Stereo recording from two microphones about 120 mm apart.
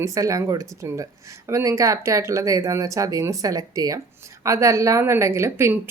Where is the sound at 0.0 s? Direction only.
25° right (ahead or behind).